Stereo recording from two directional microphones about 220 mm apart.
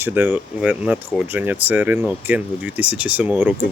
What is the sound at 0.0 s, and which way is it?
Speech, 10° right (ahead or behind).